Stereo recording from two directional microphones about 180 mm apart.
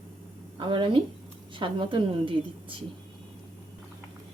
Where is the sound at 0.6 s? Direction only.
25° right (ahead or behind).